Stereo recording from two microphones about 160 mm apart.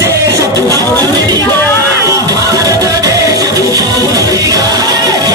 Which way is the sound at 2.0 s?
20° right (ahead or behind).